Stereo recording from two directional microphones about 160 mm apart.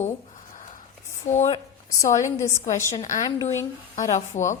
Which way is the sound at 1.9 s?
20° left (ahead or behind).